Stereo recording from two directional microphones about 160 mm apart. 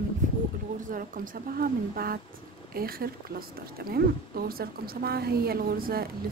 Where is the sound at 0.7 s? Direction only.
55° right (ahead or behind).